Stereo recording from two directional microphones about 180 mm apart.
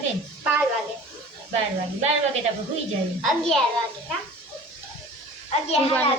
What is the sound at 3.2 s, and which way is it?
Speech, centre (ahead or behind).